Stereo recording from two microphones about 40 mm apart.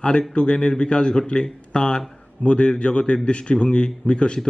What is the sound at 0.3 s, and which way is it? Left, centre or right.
A man's voice, left.